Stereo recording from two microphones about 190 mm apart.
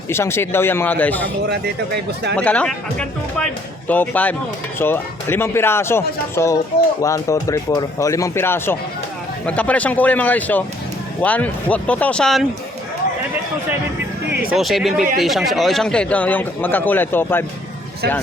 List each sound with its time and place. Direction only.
0.1 s a man's voice: 15° left (ahead or behind)
2.3 s a man's voice: 5° left (ahead or behind)
14.5 s a man's voice: centre (ahead or behind)